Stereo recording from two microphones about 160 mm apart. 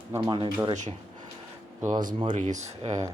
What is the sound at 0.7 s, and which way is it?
Speech, 45° right (ahead or behind).